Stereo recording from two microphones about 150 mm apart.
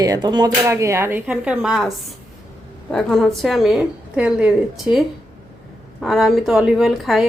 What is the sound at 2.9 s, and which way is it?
A woman's voice, centre (ahead or behind).